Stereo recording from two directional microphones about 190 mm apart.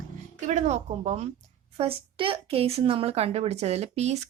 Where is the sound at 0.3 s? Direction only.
40° right (ahead or behind).